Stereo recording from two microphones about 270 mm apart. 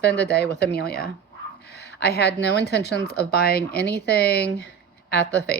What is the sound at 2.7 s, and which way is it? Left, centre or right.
Speech, left.